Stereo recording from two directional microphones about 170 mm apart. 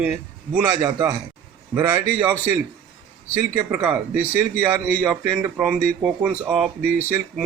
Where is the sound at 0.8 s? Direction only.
20° right (ahead or behind).